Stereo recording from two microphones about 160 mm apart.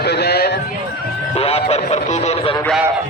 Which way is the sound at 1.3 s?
40° left (ahead or behind).